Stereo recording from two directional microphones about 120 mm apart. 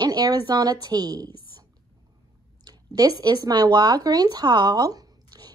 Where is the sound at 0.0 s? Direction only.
35° right (ahead or behind).